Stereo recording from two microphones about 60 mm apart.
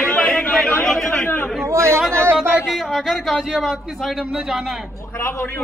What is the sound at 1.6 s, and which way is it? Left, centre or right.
Speech, right.